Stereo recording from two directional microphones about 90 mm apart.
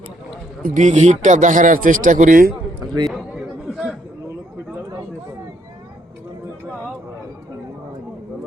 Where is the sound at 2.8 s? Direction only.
55° right (ahead or behind).